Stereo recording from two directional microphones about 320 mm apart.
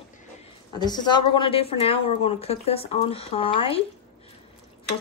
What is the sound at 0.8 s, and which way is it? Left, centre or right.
A woman's voice, centre.